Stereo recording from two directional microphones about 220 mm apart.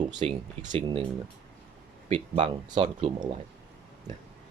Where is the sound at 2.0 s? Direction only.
25° right (ahead or behind).